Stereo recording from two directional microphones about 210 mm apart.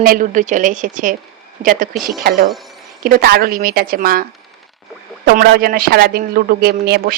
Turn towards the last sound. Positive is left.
turn(degrees=-45)  # may be behind; listen again after turning